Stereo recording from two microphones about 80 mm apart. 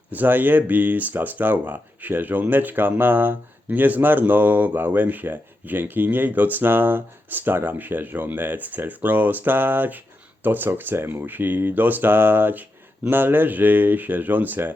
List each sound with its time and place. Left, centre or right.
0.1 s speech: right